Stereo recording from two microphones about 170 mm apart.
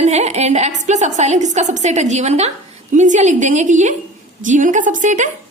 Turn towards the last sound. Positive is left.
turn(degrees=-45)  # may be behind; listen again after turning